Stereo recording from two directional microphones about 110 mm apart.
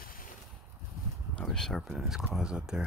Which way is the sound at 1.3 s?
5° left (ahead or behind).